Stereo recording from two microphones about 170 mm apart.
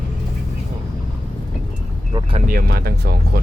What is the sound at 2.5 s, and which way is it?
Speech, 65° right (ahead or behind).